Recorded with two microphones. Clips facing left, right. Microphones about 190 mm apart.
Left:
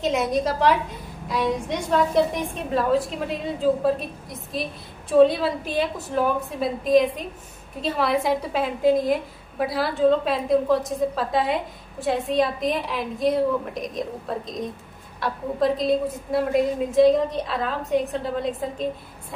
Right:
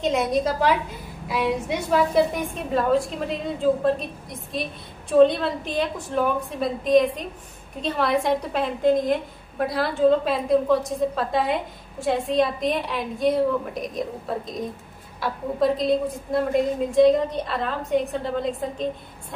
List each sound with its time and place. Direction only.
0.0 s a woman's voice: centre (ahead or behind)